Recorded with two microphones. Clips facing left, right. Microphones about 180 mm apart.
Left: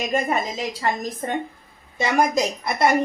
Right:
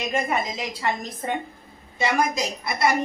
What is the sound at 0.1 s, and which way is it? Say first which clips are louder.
A woman's voice: left 2 dB; 40° left (ahead or behind).